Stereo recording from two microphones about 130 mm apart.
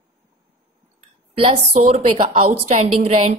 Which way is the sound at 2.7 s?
60° right (ahead or behind).